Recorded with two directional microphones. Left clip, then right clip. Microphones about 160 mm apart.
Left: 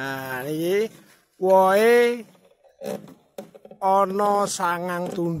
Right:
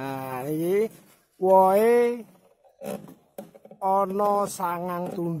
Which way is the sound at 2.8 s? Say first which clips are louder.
Left 3 dB; 60° left (ahead or behind).